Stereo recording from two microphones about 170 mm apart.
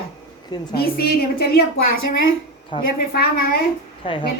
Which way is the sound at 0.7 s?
65° left (ahead or behind).